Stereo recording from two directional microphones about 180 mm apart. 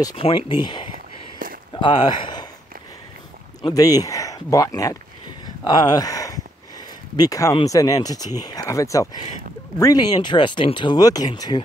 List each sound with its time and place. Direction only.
0.0 s speech: 30° left (ahead or behind)
0.9 s a sound: 50° right (ahead or behind)
1.7 s speech: 25° left (ahead or behind)
3.6 s speech: 20° left (ahead or behind)